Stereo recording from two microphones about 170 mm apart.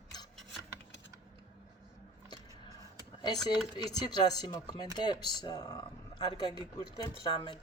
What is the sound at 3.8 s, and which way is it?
Speech, 25° left (ahead or behind).